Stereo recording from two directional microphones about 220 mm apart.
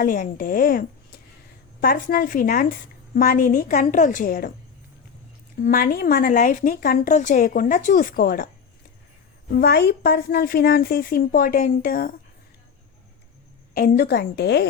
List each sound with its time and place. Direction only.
0.0 s a woman's voice: 40° left (ahead or behind)
5.6 s a woman's voice: 40° left (ahead or behind)
9.5 s a woman's voice: 45° left (ahead or behind)
13.7 s a woman's voice: 40° left (ahead or behind)